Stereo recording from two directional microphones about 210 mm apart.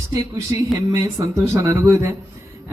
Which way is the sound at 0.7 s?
15° right (ahead or behind).